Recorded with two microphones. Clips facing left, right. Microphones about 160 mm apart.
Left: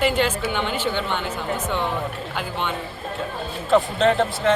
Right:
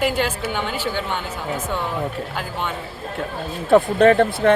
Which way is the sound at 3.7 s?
55° right (ahead or behind).